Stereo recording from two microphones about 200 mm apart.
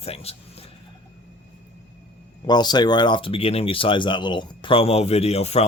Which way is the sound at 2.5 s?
20° left (ahead or behind).